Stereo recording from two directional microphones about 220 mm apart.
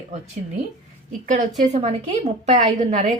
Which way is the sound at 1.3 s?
30° right (ahead or behind).